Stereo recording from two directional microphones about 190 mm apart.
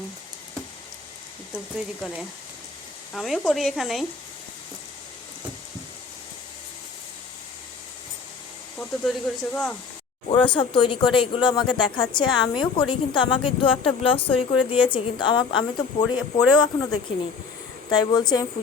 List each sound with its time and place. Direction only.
1.5 s speech: centre (ahead or behind)
8.8 s speech: centre (ahead or behind)
10.2 s a woman's voice: 25° left (ahead or behind)
17.9 s a woman's voice: 20° left (ahead or behind)